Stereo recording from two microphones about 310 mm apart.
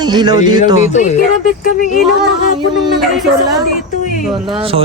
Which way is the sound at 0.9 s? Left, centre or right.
Left.